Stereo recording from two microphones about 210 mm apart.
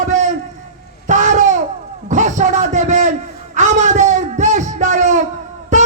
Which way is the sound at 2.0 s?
35° right (ahead or behind).